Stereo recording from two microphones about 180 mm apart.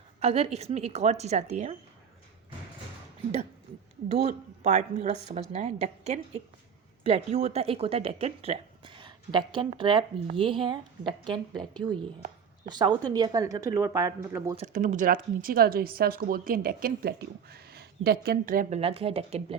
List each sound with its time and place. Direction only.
0.2 s a woman's voice: 35° right (ahead or behind)
4.2 s a woman's voice: 40° right (ahead or behind); by 14.5 s 15° right (ahead or behind)
14.5 s speech: 40° right (ahead or behind)
18.8 s a woman's voice: 30° right (ahead or behind)